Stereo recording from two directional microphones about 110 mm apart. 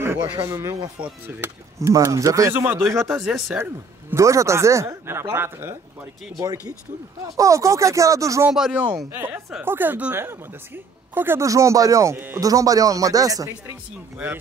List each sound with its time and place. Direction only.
0.0 s a sound: 25° right (ahead or behind)
1.0 s a woman's voice: 20° right (ahead or behind)
3.0 s speech: centre (ahead or behind)
3.4 s a woman's voice: 20° right (ahead or behind)
7.3 s a woman's voice: 30° right (ahead or behind)
8.5 s speech: 5° right (ahead or behind)
8.9 s a woman's voice: 20° right (ahead or behind)
12.4 s speech: 30° right (ahead or behind)
14.1 s speech: 15° right (ahead or behind)